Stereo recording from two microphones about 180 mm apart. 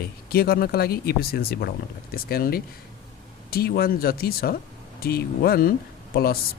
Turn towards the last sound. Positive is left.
turn(degrees=60)  # may be behind; listen again after turning